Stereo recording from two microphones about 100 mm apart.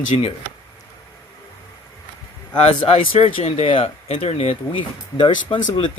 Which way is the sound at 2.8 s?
70° left (ahead or behind).